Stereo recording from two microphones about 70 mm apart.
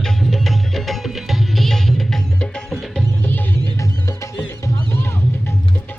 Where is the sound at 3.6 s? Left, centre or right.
Left.